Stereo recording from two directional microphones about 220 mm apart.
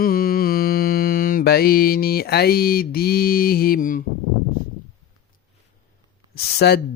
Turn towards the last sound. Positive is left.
turn(degrees=45)  # may be behind; listen again after turning